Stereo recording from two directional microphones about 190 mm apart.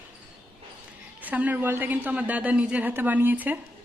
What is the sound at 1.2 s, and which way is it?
Speech, 10° right (ahead or behind).